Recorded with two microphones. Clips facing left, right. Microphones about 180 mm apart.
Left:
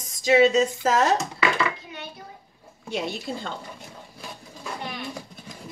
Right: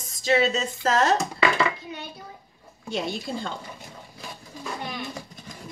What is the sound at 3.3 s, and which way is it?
Speech, centre (ahead or behind).